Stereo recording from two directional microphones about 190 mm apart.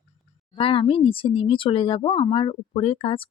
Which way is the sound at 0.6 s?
30° left (ahead or behind).